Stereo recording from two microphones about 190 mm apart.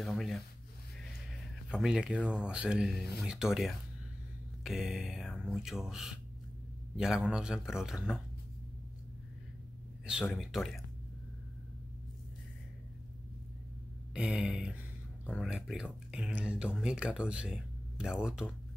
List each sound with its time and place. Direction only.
0.0 s rub: centre (ahead or behind)
1.7 s speech: 5° right (ahead or behind)
10.3 s speech: centre (ahead or behind)
14.1 s speech: 5° right (ahead or behind)